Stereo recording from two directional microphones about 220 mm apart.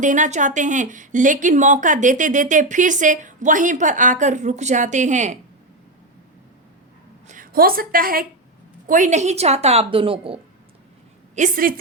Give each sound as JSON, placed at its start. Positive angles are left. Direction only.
{"t": 0.0, "sound": "a woman's voice", "side_deg": -35}
{"t": 7.3, "sound": "a woman's voice", "side_deg": -40}
{"t": 11.3, "sound": "a woman's voice", "side_deg": -35}